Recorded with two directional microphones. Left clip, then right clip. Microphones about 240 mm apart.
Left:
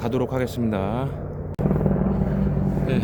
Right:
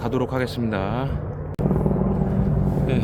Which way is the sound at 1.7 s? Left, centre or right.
Left.